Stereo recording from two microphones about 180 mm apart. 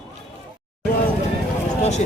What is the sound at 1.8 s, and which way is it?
Speech, 40° left (ahead or behind).